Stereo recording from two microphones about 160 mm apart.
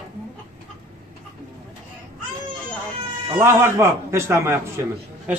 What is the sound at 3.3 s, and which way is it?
Speech, 15° right (ahead or behind).